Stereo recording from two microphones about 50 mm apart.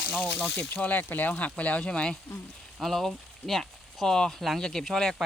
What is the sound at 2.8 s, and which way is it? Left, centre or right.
Speech, centre.